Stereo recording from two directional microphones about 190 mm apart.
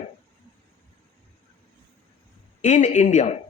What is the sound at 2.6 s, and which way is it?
Speech, 40° left (ahead or behind).